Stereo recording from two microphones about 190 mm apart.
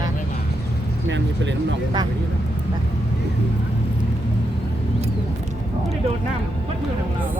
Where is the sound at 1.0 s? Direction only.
70° right (ahead or behind).